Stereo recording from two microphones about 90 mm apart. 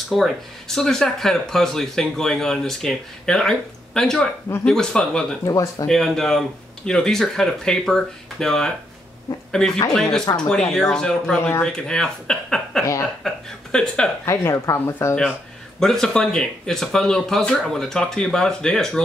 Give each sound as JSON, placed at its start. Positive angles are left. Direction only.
{"t": 0.1, "sound": "speech", "side_deg": 0}
{"t": 5.4, "sound": "speech", "side_deg": 40}
{"t": 5.9, "sound": "speech", "side_deg": 5}
{"t": 14.2, "sound": "speech", "side_deg": 30}
{"t": 15.8, "sound": "speech", "side_deg": 5}